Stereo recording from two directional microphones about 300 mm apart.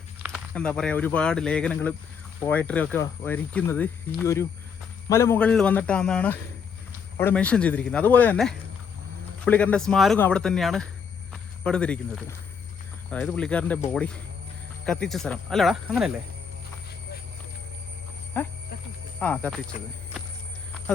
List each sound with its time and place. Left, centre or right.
0.2 s speech: centre
11.3 s a sound: centre
13.1 s speech: centre
18.3 s speech: centre
19.7 s speech: left